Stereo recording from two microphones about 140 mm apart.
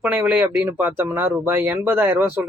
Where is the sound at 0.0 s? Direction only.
10° right (ahead or behind).